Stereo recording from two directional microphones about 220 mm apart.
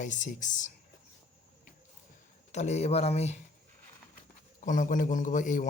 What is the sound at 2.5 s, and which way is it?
Speech, 30° left (ahead or behind).